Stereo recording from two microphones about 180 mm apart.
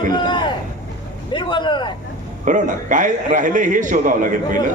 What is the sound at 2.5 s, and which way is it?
A man's voice, 45° right (ahead or behind).